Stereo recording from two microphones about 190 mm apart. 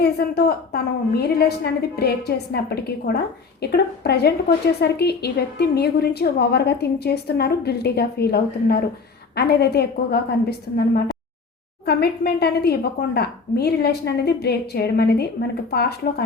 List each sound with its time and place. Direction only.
0.0 s a woman's voice: 55° left (ahead or behind)